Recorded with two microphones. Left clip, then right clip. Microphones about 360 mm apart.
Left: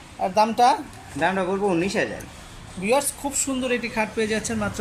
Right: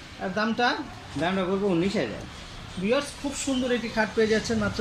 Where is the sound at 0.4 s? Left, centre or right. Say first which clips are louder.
Left 8 dB; centre.